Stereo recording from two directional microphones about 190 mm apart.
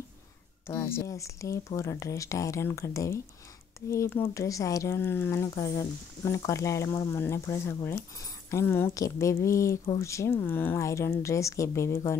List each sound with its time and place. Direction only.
0.7 s speech: 15° left (ahead or behind)